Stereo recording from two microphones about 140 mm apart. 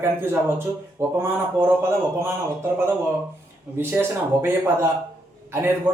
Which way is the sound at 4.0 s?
15° right (ahead or behind).